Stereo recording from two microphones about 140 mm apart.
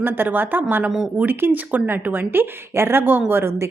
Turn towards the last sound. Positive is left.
turn(degrees=-15)  # may be behind; listen again after turning